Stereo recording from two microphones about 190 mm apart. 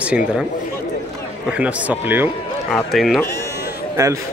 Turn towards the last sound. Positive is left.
turn(degrees=-15)  # may be behind; listen again after turning